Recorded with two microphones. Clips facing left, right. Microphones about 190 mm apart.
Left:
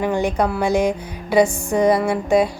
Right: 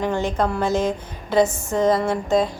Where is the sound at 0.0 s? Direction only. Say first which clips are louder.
Left 2 dB; 15° left (ahead or behind).